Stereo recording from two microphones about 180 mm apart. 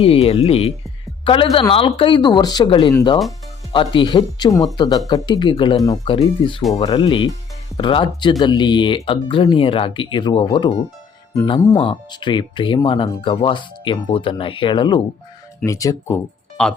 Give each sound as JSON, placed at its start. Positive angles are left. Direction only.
{"t": 0.0, "sound": "speech", "side_deg": 30}